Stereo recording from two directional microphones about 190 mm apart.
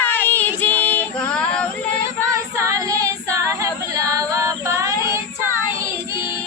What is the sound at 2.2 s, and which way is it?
Female singing, 15° right (ahead or behind).